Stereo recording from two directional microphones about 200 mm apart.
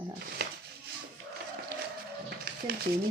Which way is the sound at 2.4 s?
50° right (ahead or behind).